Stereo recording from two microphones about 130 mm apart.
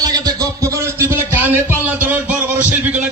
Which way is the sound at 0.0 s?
30° right (ahead or behind).